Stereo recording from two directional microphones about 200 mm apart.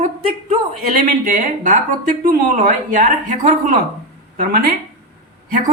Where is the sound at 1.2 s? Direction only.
40° right (ahead or behind).